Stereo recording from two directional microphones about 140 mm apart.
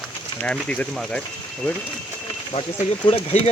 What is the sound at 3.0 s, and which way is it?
Speech, 45° left (ahead or behind).